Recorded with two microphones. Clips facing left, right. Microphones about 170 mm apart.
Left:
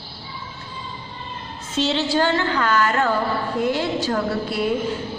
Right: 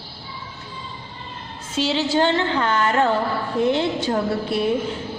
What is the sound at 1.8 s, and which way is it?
Speech, 10° right (ahead or behind).